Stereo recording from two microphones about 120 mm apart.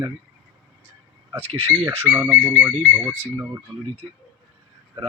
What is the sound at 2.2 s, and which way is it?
Speech, 5° left (ahead or behind).